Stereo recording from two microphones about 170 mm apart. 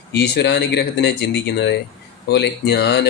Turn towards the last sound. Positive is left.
turn(degrees=80)